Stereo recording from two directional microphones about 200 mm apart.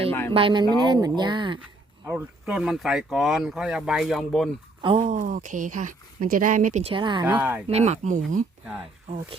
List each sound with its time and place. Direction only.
0.1 s a sound: 10° left (ahead or behind)
0.3 s speech: 25° right (ahead or behind)
2.0 s speech: 10° right (ahead or behind)
4.8 s speech: 30° right (ahead or behind)
7.3 s speech: 10° right (ahead or behind)
7.7 s speech: 35° right (ahead or behind)